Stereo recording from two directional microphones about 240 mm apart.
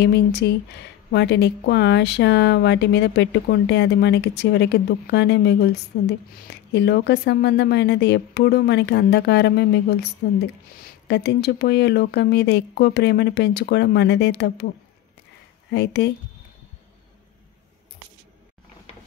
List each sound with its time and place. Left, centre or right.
0.0 s a woman's voice: left
15.7 s a woman's voice: left